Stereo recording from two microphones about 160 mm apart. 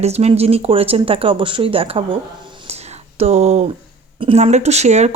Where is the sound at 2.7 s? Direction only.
40° right (ahead or behind).